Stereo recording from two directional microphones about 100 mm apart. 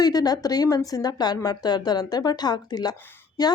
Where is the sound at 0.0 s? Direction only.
40° left (ahead or behind).